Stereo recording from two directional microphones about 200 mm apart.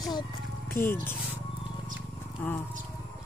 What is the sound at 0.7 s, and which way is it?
Speech, 10° left (ahead or behind).